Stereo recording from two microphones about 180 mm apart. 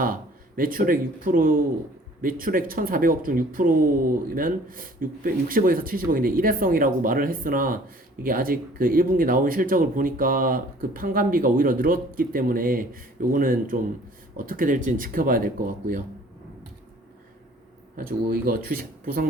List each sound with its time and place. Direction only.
0.0 s speech: 50° right (ahead or behind)
18.3 s speech: 55° right (ahead or behind)